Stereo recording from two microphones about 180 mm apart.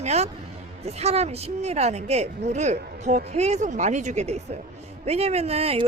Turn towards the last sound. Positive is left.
turn(degrees=-35)  # may be behind; listen again after turning